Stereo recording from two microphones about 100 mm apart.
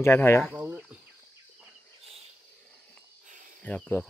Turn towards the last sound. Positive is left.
turn(degrees=20)  # may be behind; listen again after turning